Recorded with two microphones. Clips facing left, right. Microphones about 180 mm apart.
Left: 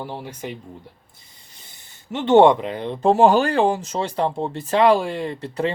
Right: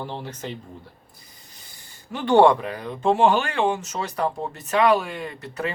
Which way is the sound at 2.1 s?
20° left (ahead or behind).